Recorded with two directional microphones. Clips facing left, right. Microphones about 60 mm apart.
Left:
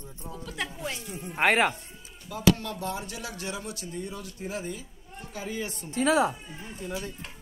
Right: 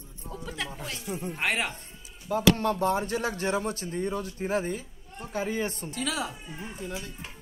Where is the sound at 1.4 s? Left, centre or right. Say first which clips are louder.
Left 8 dB; left.